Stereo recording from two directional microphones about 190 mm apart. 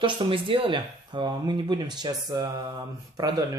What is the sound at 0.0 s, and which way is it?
Speech, 25° right (ahead or behind).